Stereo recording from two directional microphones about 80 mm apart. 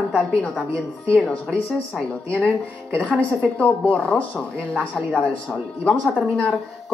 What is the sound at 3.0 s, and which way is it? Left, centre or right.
Speech, centre.